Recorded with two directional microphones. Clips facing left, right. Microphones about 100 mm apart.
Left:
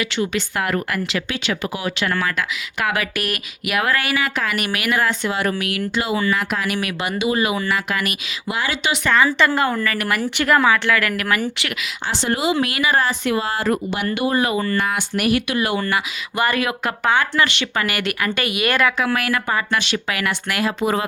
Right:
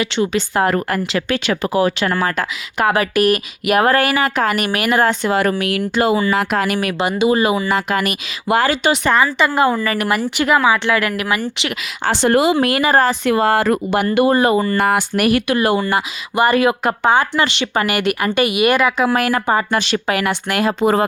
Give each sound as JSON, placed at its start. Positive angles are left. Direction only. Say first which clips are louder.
{"t": 0.0, "sound": "speech", "louder": "right 4 dB", "side_deg": -30}
{"t": 5.5, "sound": "speech", "louder": "right 5 dB", "side_deg": -35}
{"t": 6.3, "sound": "speech", "louder": "right 5 dB", "side_deg": -75}
{"t": 6.7, "sound": "speech", "louder": "right 5 dB", "side_deg": -35}
{"t": 8.4, "sound": "speech", "louder": "right 8 dB", "side_deg": -45}
{"t": 9.2, "sound": "speech", "louder": "right 1 dB", "side_deg": -5}
{"t": 9.8, "sound": "a woman's voice", "louder": "right 4 dB", "side_deg": -25}
{"t": 10.2, "sound": "speech", "louder": "left 1 dB", "side_deg": -10}
{"t": 10.8, "sound": "a woman's voice", "louder": "right 2 dB", "side_deg": -20}
{"t": 12.0, "sound": "speech", "louder": "right 7 dB", "side_deg": -60}
{"t": 12.5, "sound": "speech", "louder": "right 5 dB", "side_deg": -40}
{"t": 14.0, "sound": "speech", "louder": "right 8 dB", "side_deg": -45}
{"t": 16.3, "sound": "a woman's voice", "louder": "right 6 dB", "side_deg": -25}
{"t": 18.9, "sound": "speech", "louder": "right 5 dB", "side_deg": -30}